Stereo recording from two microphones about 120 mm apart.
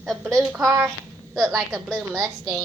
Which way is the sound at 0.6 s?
20° right (ahead or behind).